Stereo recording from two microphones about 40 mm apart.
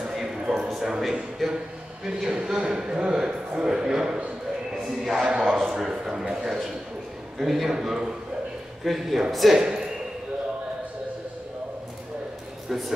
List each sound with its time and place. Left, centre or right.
0.0 s a sound: centre
1.4 s a man's voice: centre
2.4 s a man's voice: centre
7.3 s a man's voice: centre
8.8 s a man's voice: centre
9.6 s a sound: centre